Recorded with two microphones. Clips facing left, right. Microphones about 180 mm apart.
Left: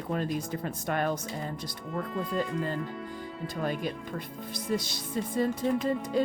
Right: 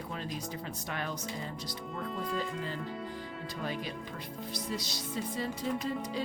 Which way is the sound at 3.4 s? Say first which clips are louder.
Left 7 dB; 50° left (ahead or behind).